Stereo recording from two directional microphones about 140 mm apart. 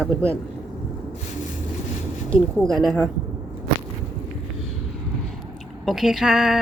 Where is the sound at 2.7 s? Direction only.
Centre (ahead or behind).